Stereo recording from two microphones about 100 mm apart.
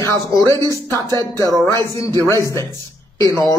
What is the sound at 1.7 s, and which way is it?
Speech, 30° left (ahead or behind).